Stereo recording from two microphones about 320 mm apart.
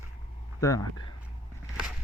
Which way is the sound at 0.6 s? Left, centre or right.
Centre.